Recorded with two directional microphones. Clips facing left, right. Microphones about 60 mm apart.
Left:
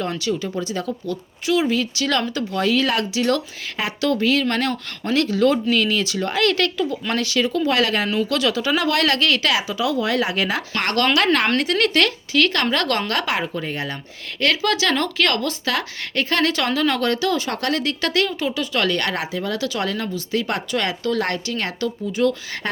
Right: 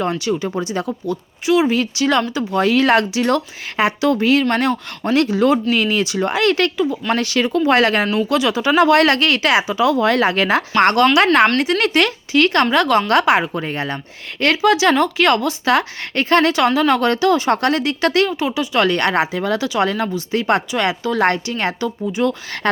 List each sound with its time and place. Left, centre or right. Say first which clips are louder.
0.0 s speech: right 4 dB; right
2.0 s speech: right 8 dB; right
2.5 s a woman's voice: right 6 dB; right; by 7.0 s centre
7.3 s speech: right 4 dB; right
8.0 s speech: right 3 dB; centre; by 10.9 s right
10.9 s speech: right 2 dB; centre
12.7 s a woman's voice: right 6 dB; centre
13.1 s speech: right 8 dB; right
22.6 s speech: right 8 dB; right